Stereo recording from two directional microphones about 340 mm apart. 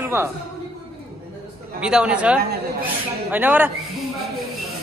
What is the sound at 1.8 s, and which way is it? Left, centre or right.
Speech, centre.